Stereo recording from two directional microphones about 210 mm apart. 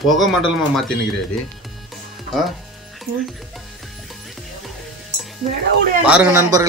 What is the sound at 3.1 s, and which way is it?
Speech, 50° right (ahead or behind).